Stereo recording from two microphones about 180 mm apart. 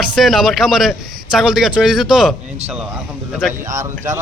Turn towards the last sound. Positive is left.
turn(degrees=-15)  # may be behind; listen again after turning